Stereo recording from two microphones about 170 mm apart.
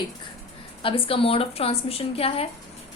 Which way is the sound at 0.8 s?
35° left (ahead or behind).